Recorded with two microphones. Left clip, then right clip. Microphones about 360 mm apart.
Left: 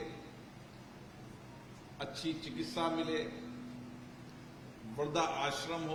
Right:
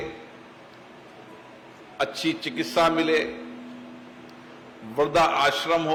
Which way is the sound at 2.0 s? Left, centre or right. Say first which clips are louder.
Right 14 dB; left.